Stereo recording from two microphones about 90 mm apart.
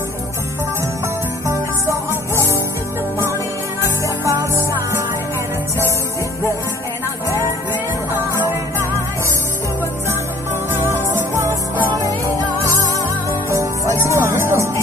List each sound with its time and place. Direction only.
1.5 s music: 35° right (ahead or behind)
4.2 s music: 35° right (ahead or behind)
13.5 s music: 35° right (ahead or behind)